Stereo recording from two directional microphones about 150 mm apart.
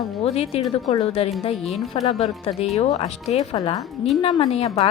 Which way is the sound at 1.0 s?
40° left (ahead or behind).